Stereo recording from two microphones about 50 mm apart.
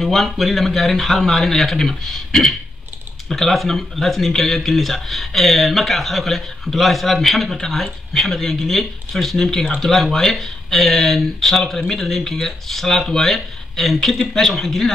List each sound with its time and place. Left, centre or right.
0.0 s speech: centre